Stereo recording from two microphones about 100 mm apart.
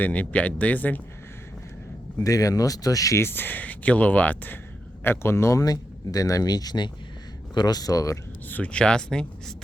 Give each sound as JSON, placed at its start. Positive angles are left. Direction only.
{"t": 0.0, "sound": "speech", "side_deg": 15}
{"t": 2.1, "sound": "speech", "side_deg": 35}
{"t": 8.4, "sound": "speech", "side_deg": 15}